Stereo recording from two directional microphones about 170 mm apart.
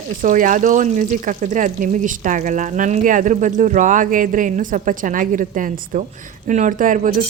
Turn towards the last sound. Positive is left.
turn(degrees=-50)  # may be behind; listen again after turning